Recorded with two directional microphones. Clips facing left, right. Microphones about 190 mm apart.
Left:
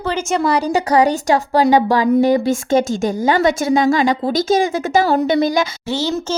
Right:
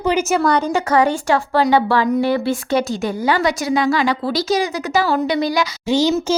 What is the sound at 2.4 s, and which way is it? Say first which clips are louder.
Speech: left 3 dB; 45° left (ahead or behind).